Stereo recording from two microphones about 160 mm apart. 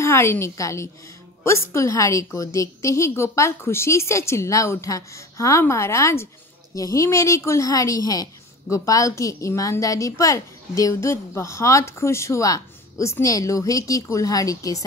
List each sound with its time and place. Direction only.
0.0 s a woman's voice: 15° left (ahead or behind)